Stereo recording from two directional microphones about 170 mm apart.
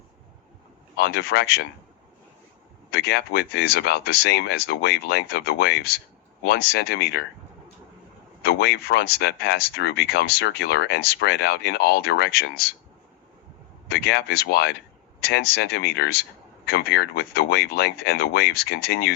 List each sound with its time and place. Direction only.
0.9 s speech: 75° left (ahead or behind)
2.9 s speech: 70° left (ahead or behind)
8.4 s speech: 70° left (ahead or behind)
13.8 s speech: 70° left (ahead or behind)